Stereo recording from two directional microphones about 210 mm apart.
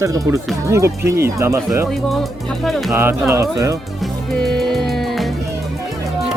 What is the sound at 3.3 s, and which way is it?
Speech, 15° right (ahead or behind).